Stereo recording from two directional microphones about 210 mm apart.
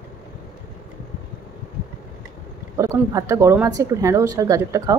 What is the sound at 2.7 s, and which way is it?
Speech, 15° right (ahead or behind).